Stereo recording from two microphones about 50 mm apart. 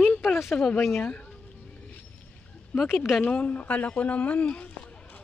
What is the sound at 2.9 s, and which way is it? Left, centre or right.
Speech, centre.